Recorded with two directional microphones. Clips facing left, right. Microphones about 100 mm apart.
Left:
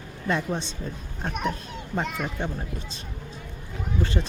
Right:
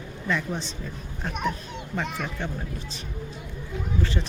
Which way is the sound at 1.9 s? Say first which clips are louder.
Left 2 dB; 20° left (ahead or behind).